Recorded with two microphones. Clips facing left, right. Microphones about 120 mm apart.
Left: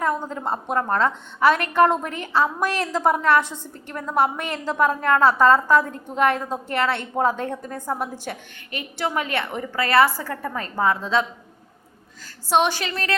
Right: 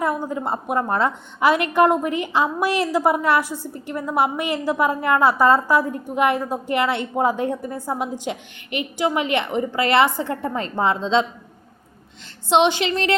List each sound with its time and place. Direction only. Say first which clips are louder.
0.0 s a woman's voice: right 1 dB; 10° right (ahead or behind)
12.5 s a woman's voice: right 3 dB; 20° right (ahead or behind)